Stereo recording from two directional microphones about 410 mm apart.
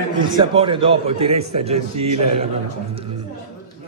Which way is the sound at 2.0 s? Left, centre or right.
Right.